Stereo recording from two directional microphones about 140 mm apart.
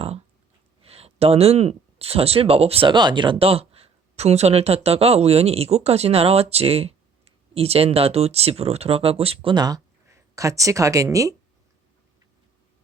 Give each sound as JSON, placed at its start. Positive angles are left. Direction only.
{"t": 0.8, "sound": "speech", "side_deg": -45}